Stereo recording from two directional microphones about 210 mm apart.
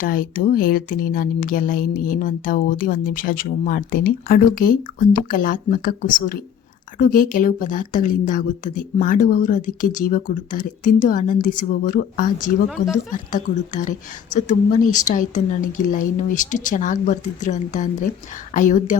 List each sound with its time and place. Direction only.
0.0 s speech: 40° left (ahead or behind)